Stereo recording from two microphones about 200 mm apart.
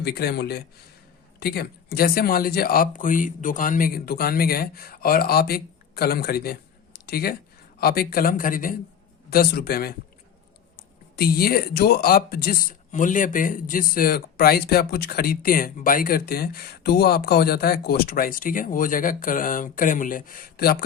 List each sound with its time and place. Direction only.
0.0 s speech: 50° left (ahead or behind)
11.2 s speech: 50° left (ahead or behind)